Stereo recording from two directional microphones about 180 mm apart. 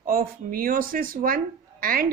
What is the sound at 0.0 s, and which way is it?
A woman's voice, 55° right (ahead or behind).